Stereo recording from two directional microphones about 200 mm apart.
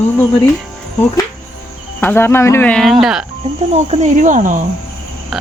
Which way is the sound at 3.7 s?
35° right (ahead or behind).